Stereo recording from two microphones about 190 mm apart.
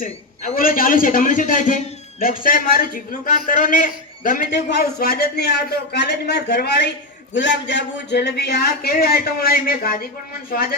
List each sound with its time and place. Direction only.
0.0 s a man's voice: 45° left (ahead or behind)
4.5 s speech: 55° left (ahead or behind)
7.3 s a man's voice: 70° left (ahead or behind); by 10.8 s 50° left (ahead or behind)